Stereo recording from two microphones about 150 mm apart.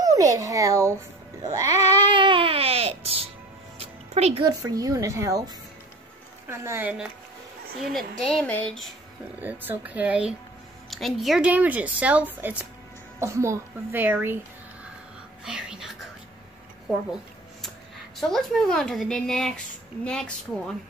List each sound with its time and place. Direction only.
0.0 s a child's voice: 20° right (ahead or behind)
1.4 s music: 25° right (ahead or behind)
1.8 s a sound: 45° left (ahead or behind)
2.0 s music: 35° right (ahead or behind)
4.5 s a woman's voice: 25° right (ahead or behind)
6.5 s a woman's voice: 15° right (ahead or behind)
8.3 s a woman's voice: 5° left (ahead or behind)
9.4 s a woman's voice: 10° right (ahead or behind)
15.4 s whispering: 5° right (ahead or behind)
17.1 s a woman's voice: centre (ahead or behind)